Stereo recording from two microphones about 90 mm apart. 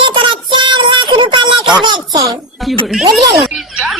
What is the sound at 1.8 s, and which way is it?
Music, 50° right (ahead or behind).